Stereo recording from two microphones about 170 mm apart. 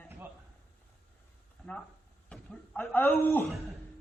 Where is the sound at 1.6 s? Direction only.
Centre (ahead or behind).